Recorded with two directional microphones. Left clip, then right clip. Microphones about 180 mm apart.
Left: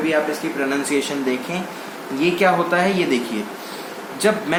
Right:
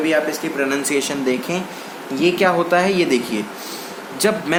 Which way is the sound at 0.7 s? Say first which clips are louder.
Right 1 dB; 60° right (ahead or behind).